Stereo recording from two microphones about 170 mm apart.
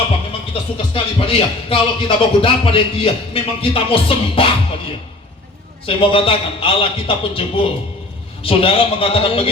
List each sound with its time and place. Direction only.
0.9 s speech: 30° left (ahead or behind)
5.8 s speech: 30° left (ahead or behind)